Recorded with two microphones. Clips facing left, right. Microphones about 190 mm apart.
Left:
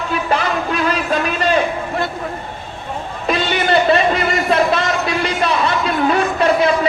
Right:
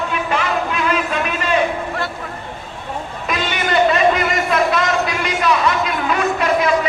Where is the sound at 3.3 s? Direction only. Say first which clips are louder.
Left 4 dB; 30° left (ahead or behind).